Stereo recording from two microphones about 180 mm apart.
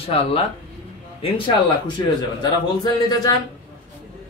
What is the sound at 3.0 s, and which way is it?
Speech, 20° left (ahead or behind).